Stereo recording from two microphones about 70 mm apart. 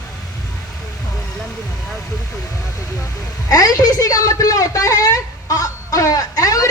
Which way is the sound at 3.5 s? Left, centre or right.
Left.